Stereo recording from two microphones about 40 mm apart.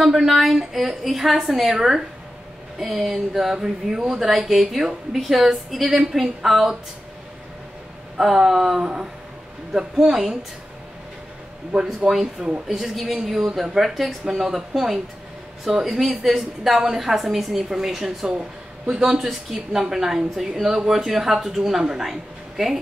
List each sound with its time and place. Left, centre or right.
0.1 s a woman's voice: centre
3.5 s a woman's voice: centre
8.5 s a woman's voice: centre
11.7 s speech: centre
12.6 s a woman's voice: centre
18.9 s speech: right
19.1 s a woman's voice: centre